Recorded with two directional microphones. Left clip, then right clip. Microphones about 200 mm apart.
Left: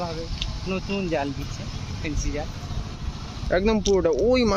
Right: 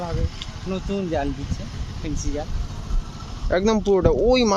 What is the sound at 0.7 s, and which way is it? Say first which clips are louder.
Speech: right 1 dB; 55° right (ahead or behind).